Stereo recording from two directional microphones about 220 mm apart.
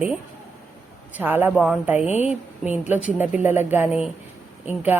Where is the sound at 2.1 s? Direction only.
30° left (ahead or behind).